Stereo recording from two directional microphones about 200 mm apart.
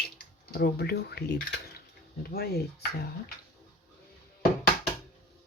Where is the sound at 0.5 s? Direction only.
55° left (ahead or behind).